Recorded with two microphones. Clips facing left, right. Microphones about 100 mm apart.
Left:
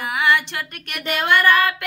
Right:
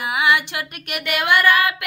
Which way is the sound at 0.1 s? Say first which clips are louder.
Even; 5° right (ahead or behind).